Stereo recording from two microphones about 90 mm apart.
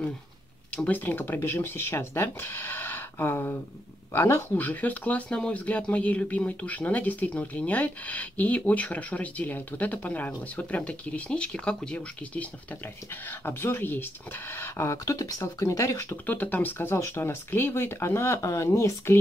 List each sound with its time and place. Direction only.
0.8 s speech: 20° left (ahead or behind)
16.3 s speech: 20° left (ahead or behind); by 19.1 s 35° left (ahead or behind)